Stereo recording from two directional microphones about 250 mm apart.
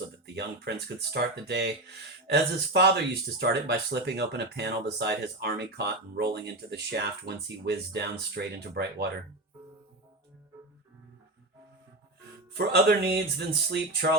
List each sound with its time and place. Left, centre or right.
0.3 s speech: right
12.5 s speech: right